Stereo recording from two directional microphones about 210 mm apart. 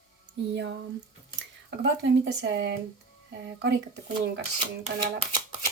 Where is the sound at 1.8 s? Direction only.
55° right (ahead or behind).